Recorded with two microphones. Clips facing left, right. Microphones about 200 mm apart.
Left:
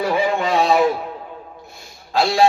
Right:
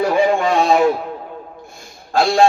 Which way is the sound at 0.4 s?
45° right (ahead or behind).